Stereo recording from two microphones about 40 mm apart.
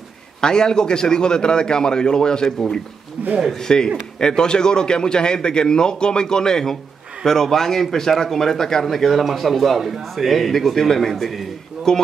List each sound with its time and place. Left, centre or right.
0.4 s a man's voice: centre
3.2 s speech: right
3.5 s a man's voice: centre
11.9 s a man's voice: centre